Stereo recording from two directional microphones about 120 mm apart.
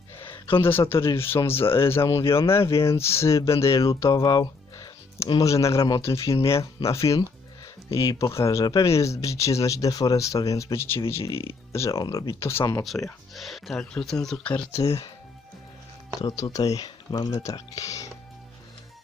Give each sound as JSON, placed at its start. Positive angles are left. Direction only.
{"t": 0.7, "sound": "speech", "side_deg": 20}
{"t": 12.8, "sound": "speech", "side_deg": 0}
{"t": 16.2, "sound": "speech", "side_deg": 25}